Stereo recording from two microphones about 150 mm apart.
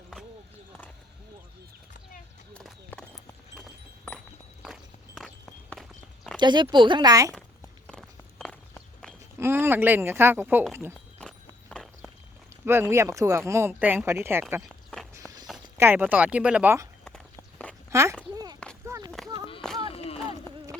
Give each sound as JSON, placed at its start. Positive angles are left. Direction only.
{"t": 2.5, "sound": "a sound", "side_deg": 5}
{"t": 3.6, "sound": "wind chime", "side_deg": 5}
{"t": 4.6, "sound": "walk", "side_deg": 0}
{"t": 6.4, "sound": "speech", "side_deg": -30}
{"t": 7.9, "sound": "walk", "side_deg": 5}
{"t": 9.4, "sound": "speech", "side_deg": -15}
{"t": 11.2, "sound": "clip-clop", "side_deg": 5}
{"t": 12.6, "sound": "speech", "side_deg": -15}
{"t": 15.1, "sound": "walk", "side_deg": -25}
{"t": 15.8, "sound": "speech", "side_deg": -15}
{"t": 17.9, "sound": "a sound", "side_deg": -20}
{"t": 19.6, "sound": "a sound", "side_deg": 5}